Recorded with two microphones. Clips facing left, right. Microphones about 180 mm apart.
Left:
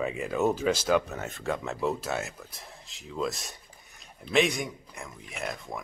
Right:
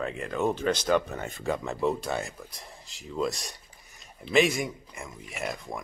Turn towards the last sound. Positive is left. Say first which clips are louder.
# right 1 dB
turn(degrees=0)  # may be behind; listen again after turning